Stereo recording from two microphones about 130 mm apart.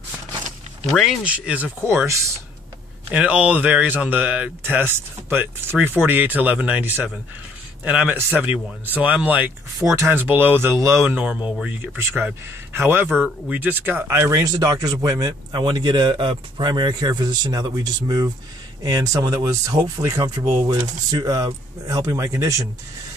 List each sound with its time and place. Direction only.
0.9 s speech: 5° right (ahead or behind)
2.0 s speech: 25° right (ahead or behind)
3.1 s speech: 10° right (ahead or behind); by 22.7 s 25° right (ahead or behind)